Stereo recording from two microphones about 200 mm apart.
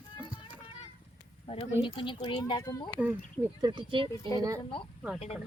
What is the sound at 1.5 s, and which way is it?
Speech, 25° left (ahead or behind).